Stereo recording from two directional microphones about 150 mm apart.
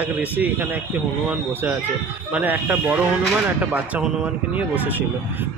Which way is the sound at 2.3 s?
10° right (ahead or behind).